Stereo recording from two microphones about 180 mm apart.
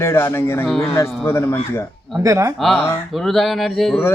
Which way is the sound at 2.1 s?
15° right (ahead or behind).